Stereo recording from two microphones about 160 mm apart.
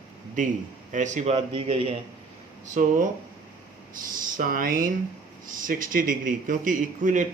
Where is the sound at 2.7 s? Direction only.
55° right (ahead or behind).